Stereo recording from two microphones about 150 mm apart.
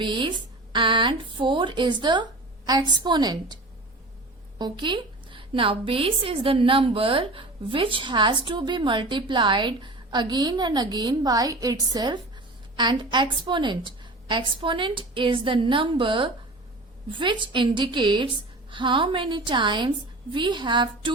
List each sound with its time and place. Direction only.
0.0 s a woman's voice: 30° right (ahead or behind)